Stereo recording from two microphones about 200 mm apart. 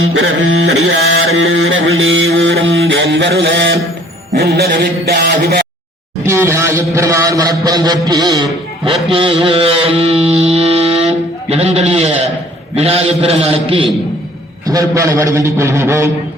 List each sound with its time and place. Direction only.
0.1 s a sound: 65° right (ahead or behind)
6.2 s a man's voice: 15° right (ahead or behind)
9.1 s music: 25° right (ahead or behind)
14.7 s a man's voice: 15° right (ahead or behind)